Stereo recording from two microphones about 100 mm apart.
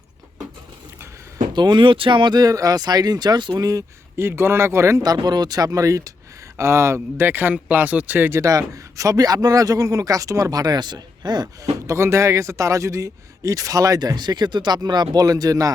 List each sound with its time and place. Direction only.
1.5 s speech: 50° right (ahead or behind)
2.4 s speech: 35° right (ahead or behind)
3.5 s speech: 35° right (ahead or behind)
4.2 s speech: 25° right (ahead or behind); by 11.7 s 45° right (ahead or behind)
11.9 s speech: 30° right (ahead or behind)